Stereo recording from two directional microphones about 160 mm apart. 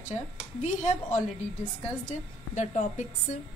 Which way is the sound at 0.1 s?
45° left (ahead or behind).